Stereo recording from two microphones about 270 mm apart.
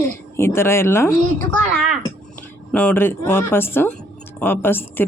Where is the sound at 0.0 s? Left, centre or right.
Centre.